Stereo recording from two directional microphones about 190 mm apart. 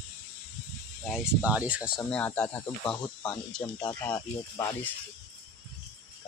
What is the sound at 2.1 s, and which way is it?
Speech, 5° left (ahead or behind).